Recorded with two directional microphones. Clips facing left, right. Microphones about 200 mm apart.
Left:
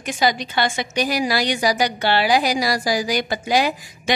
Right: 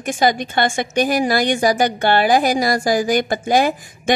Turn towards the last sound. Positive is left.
turn(degrees=-50)  # may be behind; listen again after turning